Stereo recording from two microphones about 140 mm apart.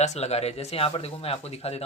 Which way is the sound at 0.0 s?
50° left (ahead or behind).